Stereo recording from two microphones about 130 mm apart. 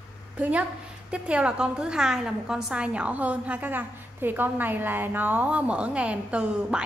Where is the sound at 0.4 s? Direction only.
10° right (ahead or behind).